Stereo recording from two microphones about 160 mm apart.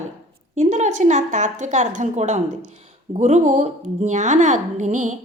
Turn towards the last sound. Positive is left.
turn(degrees=-50)  # may be behind; listen again after turning